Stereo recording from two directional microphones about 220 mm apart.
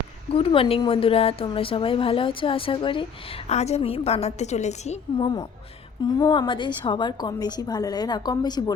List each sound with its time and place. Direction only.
0.3 s a woman's voice: 25° left (ahead or behind)